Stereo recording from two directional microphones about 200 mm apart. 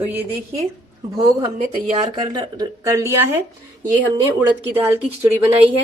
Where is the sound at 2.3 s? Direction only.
20° right (ahead or behind).